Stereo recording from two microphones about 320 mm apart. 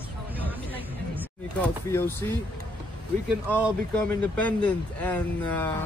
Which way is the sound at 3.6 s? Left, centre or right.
Centre.